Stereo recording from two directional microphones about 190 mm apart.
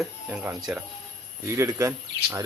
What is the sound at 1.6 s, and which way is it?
Speech, 15° right (ahead or behind).